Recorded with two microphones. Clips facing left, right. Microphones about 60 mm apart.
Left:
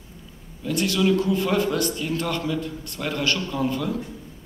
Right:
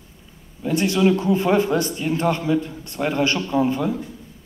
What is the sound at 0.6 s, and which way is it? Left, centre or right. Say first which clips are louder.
A man's voice: right 4 dB; right.